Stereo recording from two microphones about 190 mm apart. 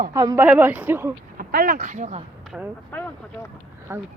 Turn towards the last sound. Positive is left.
turn(degrees=-15)  # may be behind; listen again after turning